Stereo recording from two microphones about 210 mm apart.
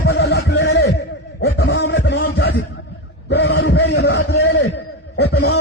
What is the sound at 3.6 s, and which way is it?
A man's voice, 55° left (ahead or behind).